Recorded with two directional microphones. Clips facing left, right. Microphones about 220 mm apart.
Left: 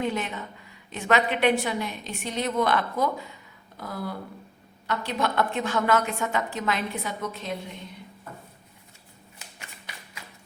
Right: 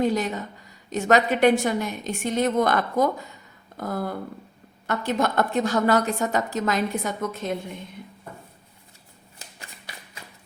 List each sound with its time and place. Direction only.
0.0 s a woman's voice: 40° right (ahead or behind)